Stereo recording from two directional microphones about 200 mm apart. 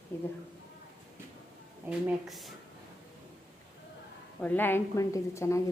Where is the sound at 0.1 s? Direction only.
10° left (ahead or behind).